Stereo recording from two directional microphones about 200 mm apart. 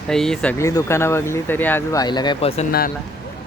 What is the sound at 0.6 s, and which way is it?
Speech, 15° left (ahead or behind).